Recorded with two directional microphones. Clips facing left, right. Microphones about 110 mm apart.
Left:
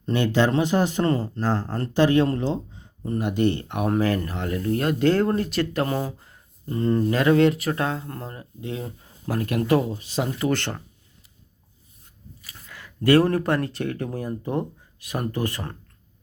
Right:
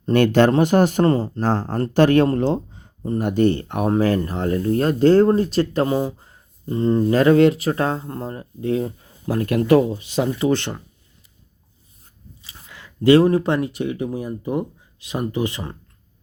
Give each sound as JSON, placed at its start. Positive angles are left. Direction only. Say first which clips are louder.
{"t": 0.1, "sound": "speech", "louder": "right 6 dB", "side_deg": -60}
{"t": 1.0, "sound": "speech", "louder": "right 5 dB", "side_deg": -35}
{"t": 1.4, "sound": "speech", "louder": "right 4 dB", "side_deg": -55}
{"t": 1.6, "sound": "speech", "louder": "right 6 dB", "side_deg": -35}
{"t": 1.9, "sound": "speech", "louder": "right 4 dB", "side_deg": -55}
{"t": 3.0, "sound": "speech", "louder": "right 4 dB", "side_deg": -30}
{"t": 5.9, "sound": "speech", "louder": "right 5 dB", "side_deg": -20}
{"t": 12.4, "sound": "speech", "louder": "right 1 dB", "side_deg": -25}
{"t": 14.9, "sound": "a sound", "louder": "right 3 dB", "side_deg": -25}
{"t": 15.2, "sound": "speech", "louder": "right 4 dB", "side_deg": -15}